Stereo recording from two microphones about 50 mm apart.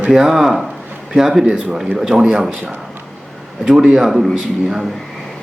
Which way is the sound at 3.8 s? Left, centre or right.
Centre.